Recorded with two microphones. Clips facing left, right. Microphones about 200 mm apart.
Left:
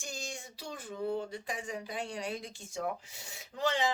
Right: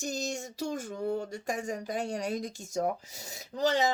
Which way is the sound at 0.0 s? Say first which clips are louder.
Right 9 dB; 40° right (ahead or behind).